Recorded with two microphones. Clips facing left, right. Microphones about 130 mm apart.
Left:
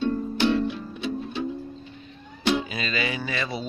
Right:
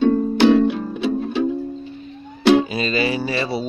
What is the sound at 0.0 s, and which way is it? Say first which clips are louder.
Music: right 9 dB; 85° right.